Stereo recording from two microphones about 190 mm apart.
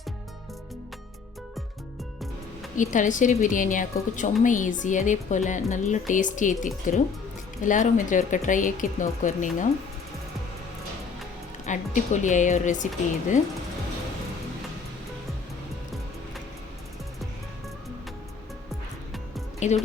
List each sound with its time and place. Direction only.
2.7 s a woman's voice: 40° left (ahead or behind)
11.6 s a woman's voice: 40° left (ahead or behind)
19.5 s speech: 35° left (ahead or behind)